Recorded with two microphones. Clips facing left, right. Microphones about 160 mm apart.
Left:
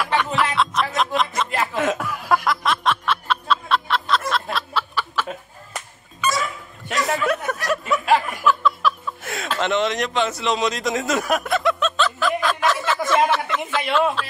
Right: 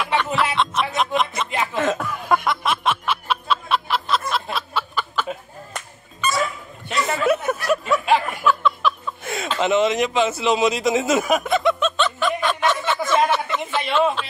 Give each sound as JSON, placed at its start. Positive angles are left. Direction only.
{"t": 0.3, "sound": "music", "side_deg": -10}
{"t": 1.4, "sound": "snicker", "side_deg": 0}
{"t": 4.3, "sound": "fowl", "side_deg": 0}
{"t": 7.1, "sound": "a sound", "side_deg": -5}